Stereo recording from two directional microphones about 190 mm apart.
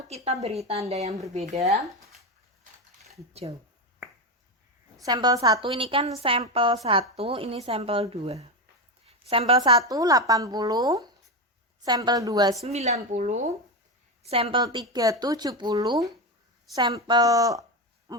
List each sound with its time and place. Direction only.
0.9 s speech: 35° right (ahead or behind)
3.5 s a woman's voice: 25° right (ahead or behind)
5.0 s a woman's voice: 20° right (ahead or behind)
12.6 s speech: 35° right (ahead or behind)
14.3 s a woman's voice: 30° right (ahead or behind)
18.1 s owl: 20° right (ahead or behind)